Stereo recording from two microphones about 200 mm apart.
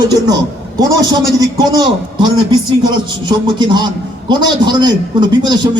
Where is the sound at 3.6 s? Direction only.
20° right (ahead or behind).